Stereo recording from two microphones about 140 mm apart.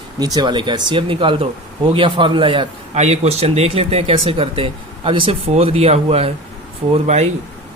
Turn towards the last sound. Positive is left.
turn(degrees=-50)  # may be behind; listen again after turning